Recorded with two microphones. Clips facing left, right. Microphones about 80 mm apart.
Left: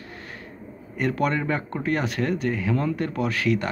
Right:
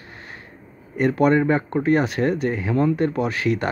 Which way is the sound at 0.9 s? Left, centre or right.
Right.